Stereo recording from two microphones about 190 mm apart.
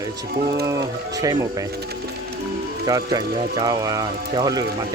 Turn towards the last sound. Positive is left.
turn(degrees=-20)  # may be behind; listen again after turning